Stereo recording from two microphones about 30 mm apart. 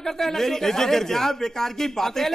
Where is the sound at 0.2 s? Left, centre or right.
Centre.